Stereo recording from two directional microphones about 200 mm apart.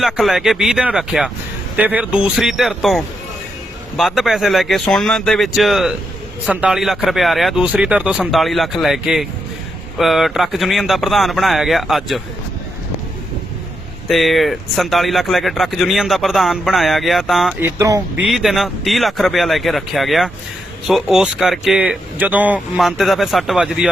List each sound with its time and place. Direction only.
0.0 s speech: centre (ahead or behind)
14.1 s speech: centre (ahead or behind)
17.7 s speech: 15° right (ahead or behind)
18.2 s speech: centre (ahead or behind)